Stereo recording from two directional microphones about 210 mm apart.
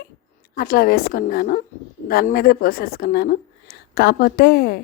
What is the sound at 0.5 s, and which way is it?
Speech, 45° left (ahead or behind).